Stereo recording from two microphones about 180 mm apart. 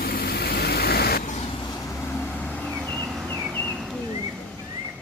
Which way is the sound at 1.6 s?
20° left (ahead or behind).